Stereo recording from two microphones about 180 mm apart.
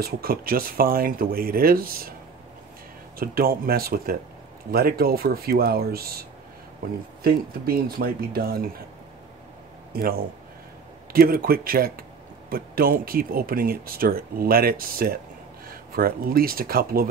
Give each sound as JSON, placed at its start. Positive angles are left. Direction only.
{"t": 0.0, "sound": "speech", "side_deg": -55}
{"t": 3.2, "sound": "speech", "side_deg": -55}
{"t": 7.2, "sound": "speech", "side_deg": -55}
{"t": 9.9, "sound": "a man's voice", "side_deg": -60}